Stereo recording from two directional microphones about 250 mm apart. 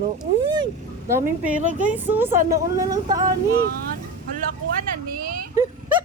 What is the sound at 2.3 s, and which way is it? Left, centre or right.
Speech, right.